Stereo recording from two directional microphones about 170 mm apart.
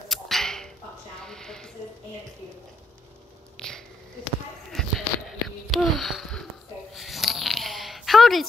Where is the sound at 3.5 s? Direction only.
5° left (ahead or behind).